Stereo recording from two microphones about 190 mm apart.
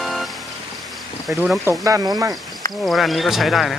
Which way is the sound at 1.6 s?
20° right (ahead or behind).